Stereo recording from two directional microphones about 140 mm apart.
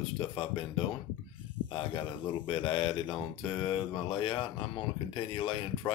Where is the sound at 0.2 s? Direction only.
35° left (ahead or behind).